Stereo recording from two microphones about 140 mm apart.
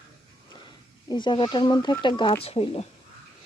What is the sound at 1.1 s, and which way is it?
Speech, 35° left (ahead or behind).